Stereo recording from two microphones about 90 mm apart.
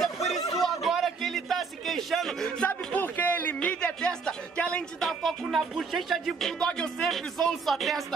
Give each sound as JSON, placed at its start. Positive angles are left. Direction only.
{"t": 0.0, "sound": "a sound", "side_deg": 0}
{"t": 2.7, "sound": "music", "side_deg": 20}
{"t": 5.0, "sound": "music", "side_deg": 0}